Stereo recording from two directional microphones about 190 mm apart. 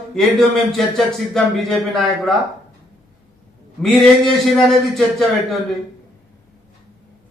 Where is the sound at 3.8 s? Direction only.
Centre (ahead or behind).